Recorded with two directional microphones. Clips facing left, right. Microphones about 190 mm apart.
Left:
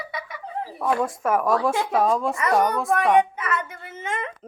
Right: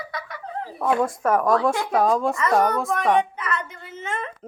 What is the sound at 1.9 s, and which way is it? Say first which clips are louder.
Speech: right 2 dB; centre (ahead or behind).